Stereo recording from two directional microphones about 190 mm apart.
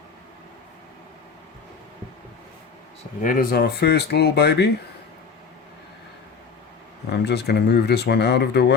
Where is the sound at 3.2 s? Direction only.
50° left (ahead or behind).